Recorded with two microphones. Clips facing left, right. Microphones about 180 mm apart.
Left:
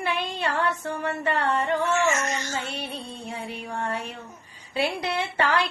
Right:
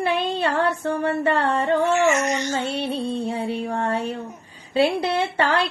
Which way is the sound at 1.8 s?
15° right (ahead or behind).